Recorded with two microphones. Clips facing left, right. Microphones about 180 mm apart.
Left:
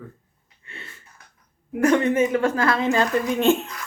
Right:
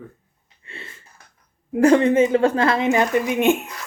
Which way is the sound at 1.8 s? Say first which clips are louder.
Right 4 dB; 30° right (ahead or behind).